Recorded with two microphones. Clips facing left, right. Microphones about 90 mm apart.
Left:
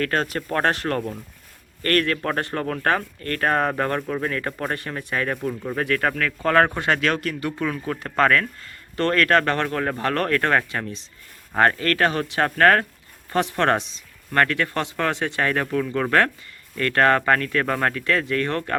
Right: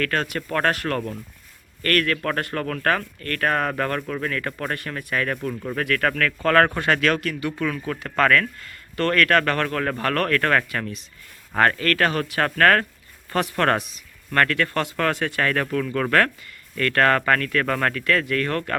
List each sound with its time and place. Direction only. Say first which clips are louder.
0.0 s speech: left 1 dB; 35° left (ahead or behind)